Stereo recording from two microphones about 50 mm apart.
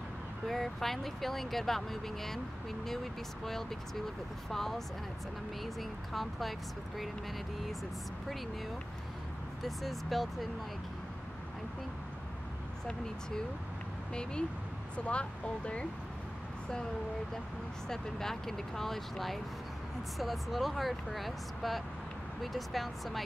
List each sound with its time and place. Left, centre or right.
0.5 s speech: centre
9.6 s speech: centre
12.8 s speech: centre
15.0 s speech: left
17.8 s speech: centre